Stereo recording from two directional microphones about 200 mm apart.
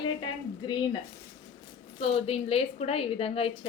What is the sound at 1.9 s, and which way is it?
A woman's voice, 30° left (ahead or behind).